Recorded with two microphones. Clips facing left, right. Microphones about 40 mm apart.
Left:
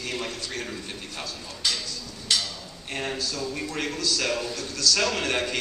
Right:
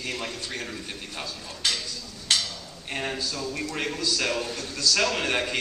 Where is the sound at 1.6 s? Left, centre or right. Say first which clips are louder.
Right 1 dB; right.